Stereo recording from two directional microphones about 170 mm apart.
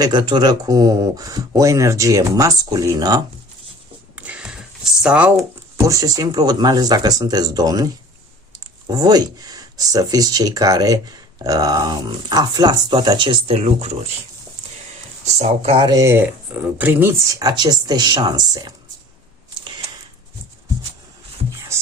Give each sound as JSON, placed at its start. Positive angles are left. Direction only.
{"t": 0.0, "sound": "speech", "side_deg": -25}
{"t": 4.1, "sound": "a sound", "side_deg": -5}
{"t": 5.8, "sound": "speech", "side_deg": -20}
{"t": 8.9, "sound": "speech", "side_deg": -20}
{"t": 15.4, "sound": "speech", "side_deg": -35}
{"t": 17.6, "sound": "speech", "side_deg": -25}